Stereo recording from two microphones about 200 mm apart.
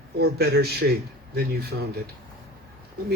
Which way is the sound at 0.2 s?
50° right (ahead or behind).